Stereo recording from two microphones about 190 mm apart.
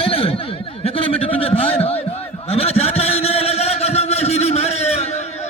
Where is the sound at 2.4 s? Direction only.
30° left (ahead or behind).